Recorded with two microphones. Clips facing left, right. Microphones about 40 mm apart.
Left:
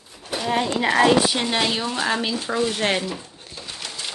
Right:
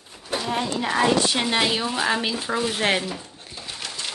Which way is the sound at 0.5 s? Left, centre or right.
Left.